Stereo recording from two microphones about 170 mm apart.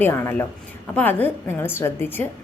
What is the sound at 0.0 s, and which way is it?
A woman's voice, 15° left (ahead or behind).